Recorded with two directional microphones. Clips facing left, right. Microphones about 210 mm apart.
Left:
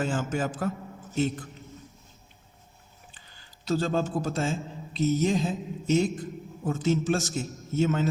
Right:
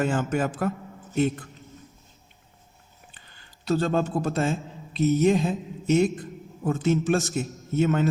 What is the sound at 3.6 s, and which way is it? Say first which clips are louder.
A man's voice: right 3 dB; 60° right (ahead or behind).